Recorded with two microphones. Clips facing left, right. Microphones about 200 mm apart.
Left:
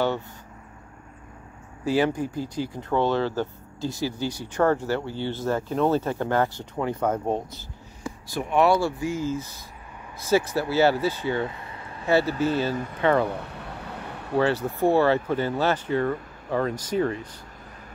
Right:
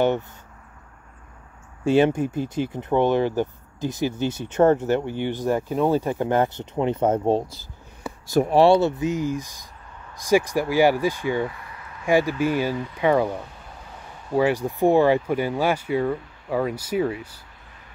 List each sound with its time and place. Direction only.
1.9 s speech: 20° right (ahead or behind)
8.3 s speech: 40° right (ahead or behind); by 11.4 s 15° right (ahead or behind)
11.4 s a sound: 25° left (ahead or behind)
12.1 s speech: 15° right (ahead or behind)
12.7 s speech: 50° left (ahead or behind)
13.0 s speech: 10° right (ahead or behind)
13.4 s a sound: 70° left (ahead or behind)
14.3 s speech: 10° right (ahead or behind)